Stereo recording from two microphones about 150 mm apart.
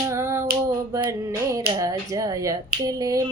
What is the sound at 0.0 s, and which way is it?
Female singing, 20° right (ahead or behind).